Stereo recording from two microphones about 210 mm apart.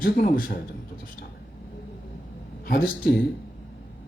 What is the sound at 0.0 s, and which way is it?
Speech, 45° left (ahead or behind).